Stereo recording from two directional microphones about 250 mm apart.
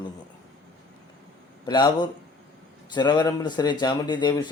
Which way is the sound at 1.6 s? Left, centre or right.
Centre.